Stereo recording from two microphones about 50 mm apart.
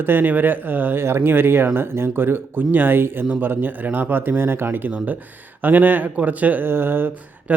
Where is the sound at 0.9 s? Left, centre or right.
Right.